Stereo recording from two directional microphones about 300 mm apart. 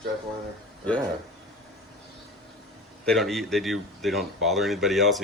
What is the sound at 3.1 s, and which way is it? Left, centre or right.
Speech, centre.